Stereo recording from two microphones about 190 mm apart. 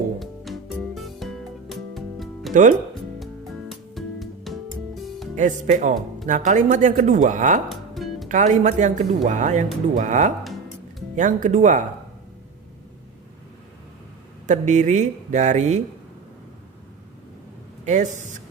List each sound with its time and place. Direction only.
0.2 s music: centre (ahead or behind)
2.5 s speech: 40° right (ahead or behind)
3.2 s music: centre (ahead or behind)
5.3 s speech: 40° right (ahead or behind)
7.7 s music: centre (ahead or behind)
8.3 s speech: 40° right (ahead or behind)
14.4 s speech: 40° right (ahead or behind)
17.8 s speech: 40° right (ahead or behind)